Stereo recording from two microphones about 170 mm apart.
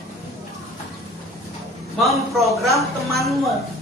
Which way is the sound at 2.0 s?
Centre (ahead or behind).